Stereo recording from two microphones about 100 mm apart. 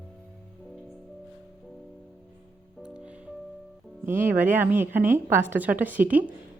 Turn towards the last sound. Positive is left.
turn(degrees=-15)  # may be behind; listen again after turning